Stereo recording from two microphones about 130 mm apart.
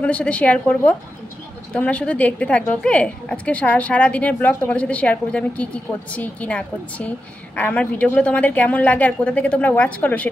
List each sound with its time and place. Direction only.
0.0 s a woman's voice: 10° left (ahead or behind)